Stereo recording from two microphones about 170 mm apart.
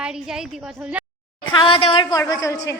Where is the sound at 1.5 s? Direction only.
30° left (ahead or behind).